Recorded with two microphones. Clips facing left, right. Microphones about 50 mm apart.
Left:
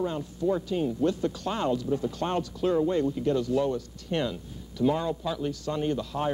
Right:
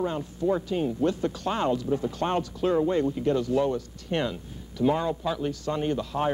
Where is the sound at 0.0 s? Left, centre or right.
Right.